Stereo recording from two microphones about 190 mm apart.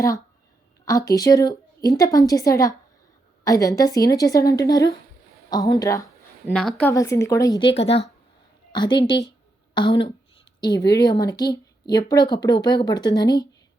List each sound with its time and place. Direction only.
0.9 s a woman's voice: 15° left (ahead or behind)
6.5 s a woman's voice: 5° left (ahead or behind)
6.9 s a woman's voice: 15° left (ahead or behind)
8.7 s a woman's voice: 25° left (ahead or behind)
9.7 s a sound: 25° left (ahead or behind)
10.9 s speech: 20° left (ahead or behind)